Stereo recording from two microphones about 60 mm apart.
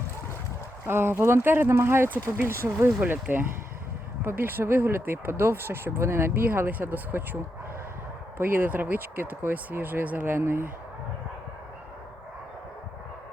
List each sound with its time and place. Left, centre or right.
0.9 s speech: right
3.0 s speech: right
8.4 s speech: right
10.3 s speech: right